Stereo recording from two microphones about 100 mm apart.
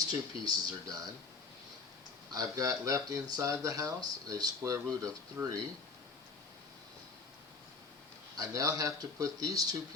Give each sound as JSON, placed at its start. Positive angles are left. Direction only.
{"t": 0.4, "sound": "speech", "side_deg": -40}
{"t": 2.3, "sound": "speech", "side_deg": -35}
{"t": 8.4, "sound": "speech", "side_deg": -35}